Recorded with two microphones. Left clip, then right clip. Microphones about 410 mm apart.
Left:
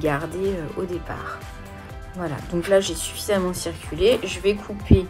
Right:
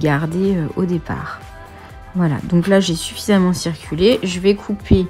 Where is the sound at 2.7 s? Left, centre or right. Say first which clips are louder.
Right 3 dB; right.